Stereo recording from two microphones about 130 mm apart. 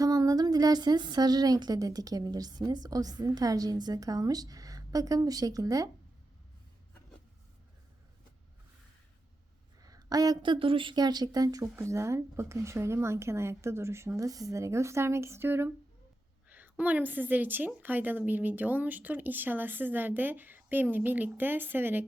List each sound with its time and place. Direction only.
0.0 s a woman's voice: 30° right (ahead or behind)
9.8 s a woman's voice: 30° right (ahead or behind)